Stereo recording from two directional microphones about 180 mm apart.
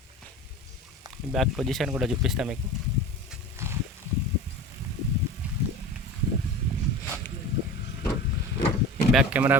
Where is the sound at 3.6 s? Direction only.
15° right (ahead or behind).